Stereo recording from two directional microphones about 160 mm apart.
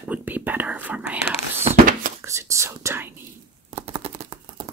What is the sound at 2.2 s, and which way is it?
Whispering, 20° right (ahead or behind).